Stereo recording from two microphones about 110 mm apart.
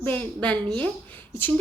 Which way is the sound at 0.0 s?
15° left (ahead or behind).